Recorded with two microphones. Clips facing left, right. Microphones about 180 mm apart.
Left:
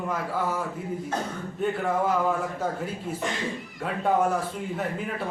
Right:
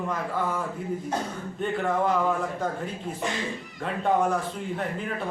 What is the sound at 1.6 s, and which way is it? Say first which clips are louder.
Speech: even; 5° left (ahead or behind).